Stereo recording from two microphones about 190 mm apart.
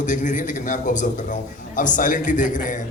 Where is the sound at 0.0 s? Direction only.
40° left (ahead or behind).